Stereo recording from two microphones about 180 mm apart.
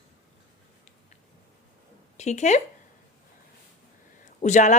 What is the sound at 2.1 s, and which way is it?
Speech, 40° left (ahead or behind).